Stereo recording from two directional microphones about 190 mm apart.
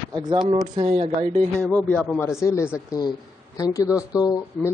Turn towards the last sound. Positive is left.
turn(degrees=20)  # may be behind; listen again after turning